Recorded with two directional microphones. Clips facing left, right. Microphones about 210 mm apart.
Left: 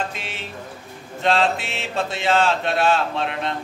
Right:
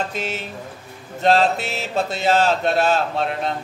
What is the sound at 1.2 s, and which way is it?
Mantra, 40° right (ahead or behind).